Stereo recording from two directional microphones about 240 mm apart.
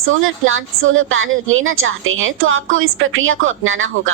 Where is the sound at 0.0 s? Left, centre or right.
Right.